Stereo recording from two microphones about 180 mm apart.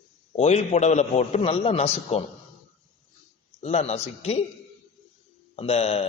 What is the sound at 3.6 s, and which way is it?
Speech, 35° left (ahead or behind).